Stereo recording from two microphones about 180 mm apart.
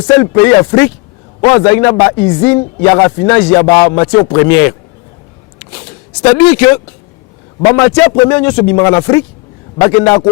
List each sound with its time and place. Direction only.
0.1 s speech: 15° left (ahead or behind)
6.3 s speech: 10° left (ahead or behind)